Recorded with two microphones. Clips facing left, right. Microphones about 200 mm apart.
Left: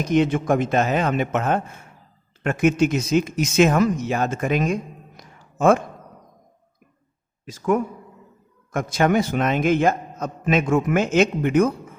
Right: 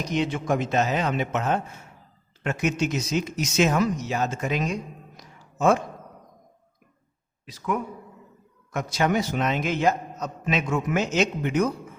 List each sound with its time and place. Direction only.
0.0 s a man's voice: 50° left (ahead or behind)
7.4 s a man's voice: 45° left (ahead or behind)